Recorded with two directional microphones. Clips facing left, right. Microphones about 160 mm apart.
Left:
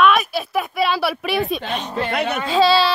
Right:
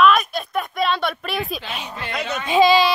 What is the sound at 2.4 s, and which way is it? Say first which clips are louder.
Speech: right 2 dB; 15° right (ahead or behind).